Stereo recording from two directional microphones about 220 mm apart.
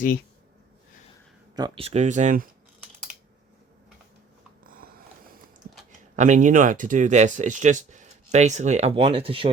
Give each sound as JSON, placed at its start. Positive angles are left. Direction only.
{"t": 1.5, "sound": "speech", "side_deg": -20}
{"t": 4.6, "sound": "a sound", "side_deg": -40}
{"t": 6.1, "sound": "speech", "side_deg": -35}